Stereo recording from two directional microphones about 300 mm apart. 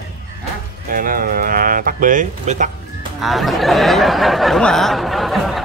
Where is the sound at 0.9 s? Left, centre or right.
Right.